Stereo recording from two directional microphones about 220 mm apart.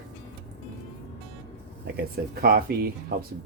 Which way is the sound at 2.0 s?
45° right (ahead or behind).